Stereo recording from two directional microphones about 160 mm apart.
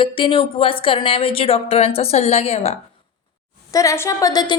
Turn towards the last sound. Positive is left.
turn(degrees=25)  # may be behind; listen again after turning